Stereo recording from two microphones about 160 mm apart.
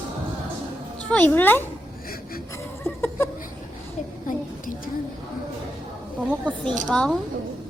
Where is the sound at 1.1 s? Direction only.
10° left (ahead or behind).